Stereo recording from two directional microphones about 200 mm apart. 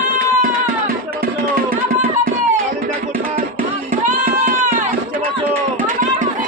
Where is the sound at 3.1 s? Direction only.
45° right (ahead or behind).